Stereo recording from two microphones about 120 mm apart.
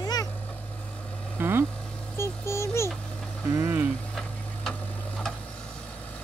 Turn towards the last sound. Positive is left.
turn(degrees=10)  # may be behind; listen again after turning